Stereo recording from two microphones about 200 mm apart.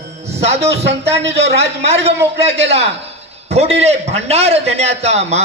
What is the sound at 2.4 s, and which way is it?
A man's voice, 30° right (ahead or behind).